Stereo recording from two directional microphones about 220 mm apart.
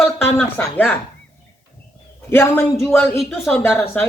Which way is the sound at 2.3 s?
10° left (ahead or behind).